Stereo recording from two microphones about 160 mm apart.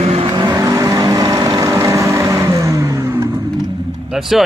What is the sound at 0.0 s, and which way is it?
Vehicle, 35° right (ahead or behind).